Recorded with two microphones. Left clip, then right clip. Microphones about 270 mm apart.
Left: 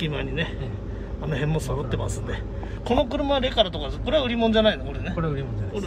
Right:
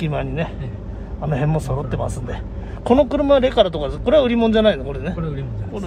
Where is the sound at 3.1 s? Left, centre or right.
Right.